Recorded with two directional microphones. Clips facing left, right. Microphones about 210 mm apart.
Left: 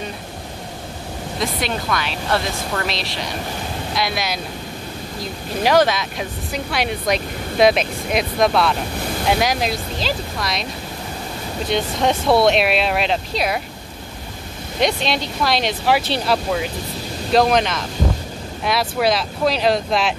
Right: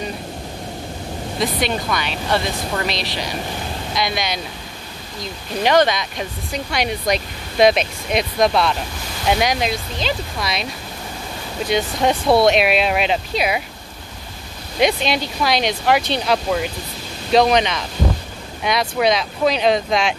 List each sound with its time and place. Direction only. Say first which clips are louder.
1.4 s speech: right 2 dB; centre (ahead or behind)
5.6 s speech: even; 5° left (ahead or behind)
14.8 s speech: right 2 dB; centre (ahead or behind)